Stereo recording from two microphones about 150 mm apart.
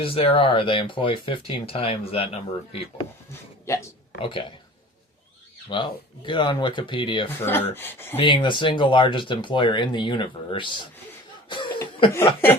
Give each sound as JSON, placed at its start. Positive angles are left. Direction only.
{"t": 0.0, "sound": "speech", "side_deg": 40}
{"t": 3.7, "sound": "speech", "side_deg": 20}
{"t": 4.2, "sound": "speech", "side_deg": 35}
{"t": 5.6, "sound": "speech", "side_deg": 30}
{"t": 7.3, "sound": "speech", "side_deg": 15}
{"t": 8.1, "sound": "speech", "side_deg": 35}
{"t": 11.4, "sound": "cough", "side_deg": 30}